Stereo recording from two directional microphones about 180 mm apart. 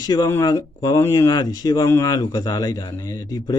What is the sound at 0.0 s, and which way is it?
Speech, 20° left (ahead or behind).